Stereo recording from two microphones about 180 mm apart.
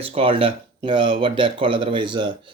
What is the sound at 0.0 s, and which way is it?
Speech, 30° right (ahead or behind).